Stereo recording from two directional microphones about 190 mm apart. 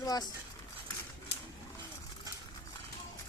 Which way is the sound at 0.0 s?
20° left (ahead or behind).